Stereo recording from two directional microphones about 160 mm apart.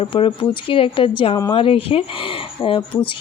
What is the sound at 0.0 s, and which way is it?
Speech, 35° left (ahead or behind).